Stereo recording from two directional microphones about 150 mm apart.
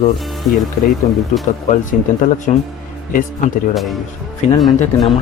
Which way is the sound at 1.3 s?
55° left (ahead or behind).